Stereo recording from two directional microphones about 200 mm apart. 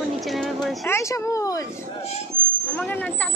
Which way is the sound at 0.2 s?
Centre (ahead or behind).